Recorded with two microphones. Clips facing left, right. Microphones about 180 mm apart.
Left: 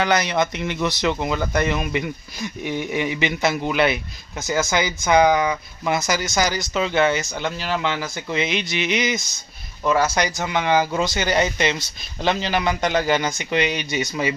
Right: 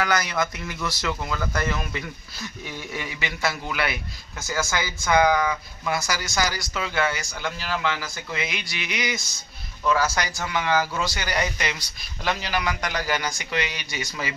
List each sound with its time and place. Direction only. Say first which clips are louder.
0.0 s speech: left 4 dB; 20° left (ahead or behind)